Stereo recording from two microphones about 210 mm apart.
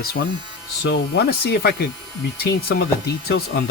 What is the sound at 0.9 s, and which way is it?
Speech, 50° left (ahead or behind).